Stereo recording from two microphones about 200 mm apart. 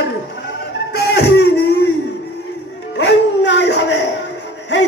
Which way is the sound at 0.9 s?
55° left (ahead or behind).